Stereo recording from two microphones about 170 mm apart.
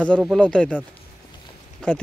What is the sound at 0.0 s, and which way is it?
Speech, 5° left (ahead or behind).